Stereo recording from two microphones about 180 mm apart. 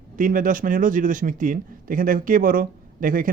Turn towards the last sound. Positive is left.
turn(degrees=-50)  # may be behind; listen again after turning